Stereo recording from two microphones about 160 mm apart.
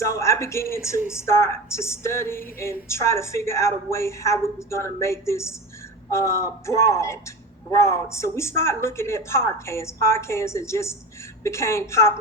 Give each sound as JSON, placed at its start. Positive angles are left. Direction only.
{"t": 0.0, "sound": "a woman's voice", "side_deg": 20}